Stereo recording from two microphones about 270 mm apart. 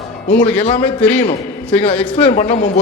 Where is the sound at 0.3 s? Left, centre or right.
Left.